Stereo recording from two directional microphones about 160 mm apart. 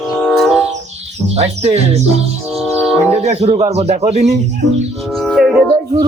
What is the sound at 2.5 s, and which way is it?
Music, centre (ahead or behind).